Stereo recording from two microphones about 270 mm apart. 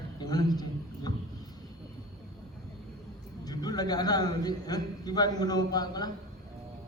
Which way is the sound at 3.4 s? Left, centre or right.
Centre.